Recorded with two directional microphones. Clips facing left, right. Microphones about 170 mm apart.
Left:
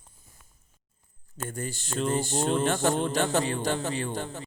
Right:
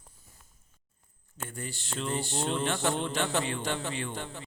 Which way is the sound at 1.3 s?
45° left (ahead or behind).